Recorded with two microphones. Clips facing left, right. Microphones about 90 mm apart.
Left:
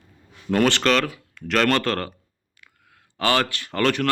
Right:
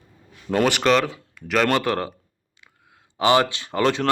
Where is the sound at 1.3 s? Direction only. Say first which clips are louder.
Even; 10° right (ahead or behind).